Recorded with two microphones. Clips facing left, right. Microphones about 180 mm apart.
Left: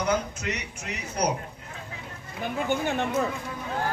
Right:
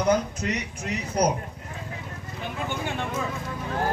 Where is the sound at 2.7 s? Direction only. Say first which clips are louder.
Left 5 dB; 45° left (ahead or behind).